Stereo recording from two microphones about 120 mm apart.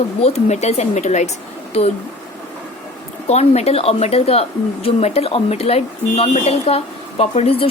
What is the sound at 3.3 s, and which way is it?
A woman's voice, 65° left (ahead or behind).